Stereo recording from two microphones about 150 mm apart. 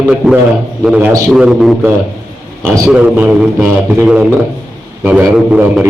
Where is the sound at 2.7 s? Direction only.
20° right (ahead or behind).